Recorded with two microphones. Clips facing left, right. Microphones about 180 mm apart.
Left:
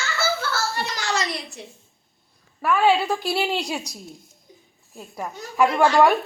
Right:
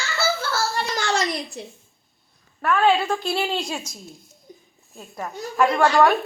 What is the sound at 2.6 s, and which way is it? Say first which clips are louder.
A woman's voice: even; 10° left (ahead or behind).